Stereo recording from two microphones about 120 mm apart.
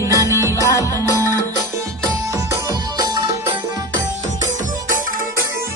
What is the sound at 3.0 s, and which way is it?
Music, 30° right (ahead or behind).